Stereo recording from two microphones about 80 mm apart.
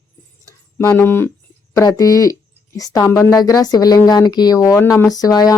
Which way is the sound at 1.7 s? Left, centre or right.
Left.